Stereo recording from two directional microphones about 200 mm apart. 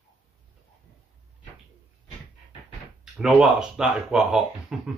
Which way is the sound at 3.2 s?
5° right (ahead or behind).